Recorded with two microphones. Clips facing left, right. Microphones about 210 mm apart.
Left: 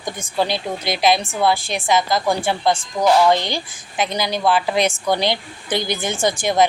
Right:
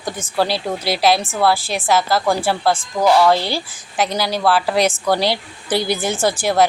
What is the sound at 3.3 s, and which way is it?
Speech, 10° right (ahead or behind).